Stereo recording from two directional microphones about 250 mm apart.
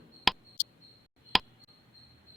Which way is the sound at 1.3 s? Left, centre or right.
Centre.